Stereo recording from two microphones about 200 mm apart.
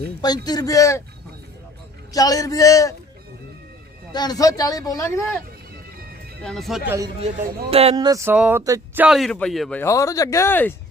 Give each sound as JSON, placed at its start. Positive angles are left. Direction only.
{"t": 0.2, "sound": "speech", "side_deg": 20}
{"t": 2.1, "sound": "speech", "side_deg": 15}
{"t": 4.1, "sound": "speech", "side_deg": 20}
{"t": 6.4, "sound": "speech", "side_deg": 0}
{"t": 7.7, "sound": "speech", "side_deg": -30}
{"t": 7.9, "sound": "speech", "side_deg": -20}
{"t": 9.0, "sound": "speech", "side_deg": 0}